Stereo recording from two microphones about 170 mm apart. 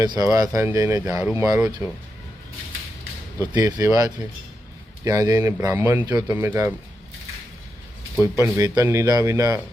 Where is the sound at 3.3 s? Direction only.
20° right (ahead or behind).